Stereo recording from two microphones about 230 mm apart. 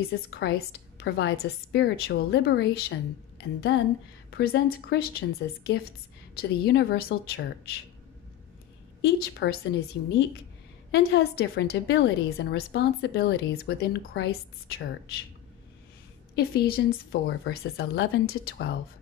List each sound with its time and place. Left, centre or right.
0.3 s a woman's voice: left
6.3 s a woman's voice: left
9.0 s a woman's voice: left
16.3 s a woman's voice: left